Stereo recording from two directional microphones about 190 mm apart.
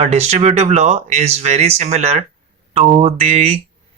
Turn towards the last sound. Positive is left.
turn(degrees=-35)  # may be behind; listen again after turning